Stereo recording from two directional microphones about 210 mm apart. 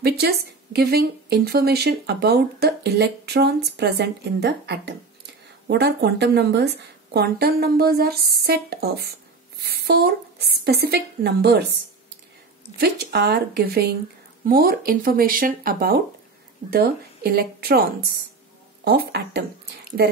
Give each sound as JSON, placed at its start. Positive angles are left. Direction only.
{"t": 0.0, "sound": "a woman's voice", "side_deg": -50}
{"t": 12.7, "sound": "a woman's voice", "side_deg": -50}
{"t": 18.9, "sound": "a woman's voice", "side_deg": -50}